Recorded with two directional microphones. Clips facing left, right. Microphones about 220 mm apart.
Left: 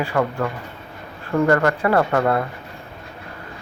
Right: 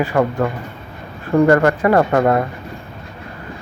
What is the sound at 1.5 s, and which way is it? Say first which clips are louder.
Speech: right 4 dB; 20° right (ahead or behind).